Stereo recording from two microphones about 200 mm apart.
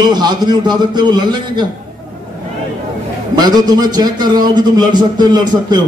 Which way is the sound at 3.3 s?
20° right (ahead or behind).